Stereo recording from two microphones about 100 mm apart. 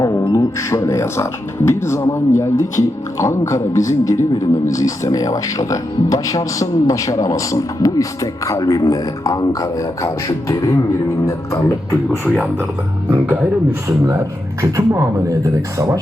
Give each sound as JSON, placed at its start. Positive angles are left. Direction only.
{"t": 0.0, "sound": "speech", "side_deg": 30}
{"t": 13.1, "sound": "speech", "side_deg": -20}
{"t": 13.8, "sound": "speech", "side_deg": -30}